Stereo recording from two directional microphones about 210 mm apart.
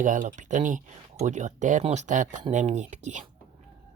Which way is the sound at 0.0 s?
40° right (ahead or behind).